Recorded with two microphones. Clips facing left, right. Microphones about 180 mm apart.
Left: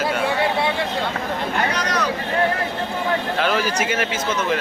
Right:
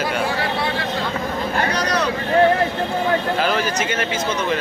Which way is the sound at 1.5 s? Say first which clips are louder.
Right 3 dB; 35° right (ahead or behind).